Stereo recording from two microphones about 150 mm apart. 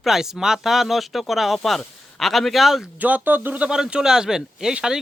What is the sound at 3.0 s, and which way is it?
Speech, 10° right (ahead or behind).